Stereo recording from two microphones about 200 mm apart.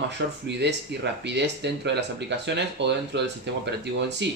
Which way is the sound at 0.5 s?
60° right (ahead or behind).